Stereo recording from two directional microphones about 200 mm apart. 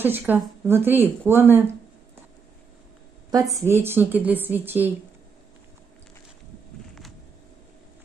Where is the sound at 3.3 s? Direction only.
15° right (ahead or behind).